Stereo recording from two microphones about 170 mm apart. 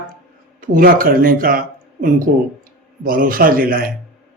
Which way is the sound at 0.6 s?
55° right (ahead or behind).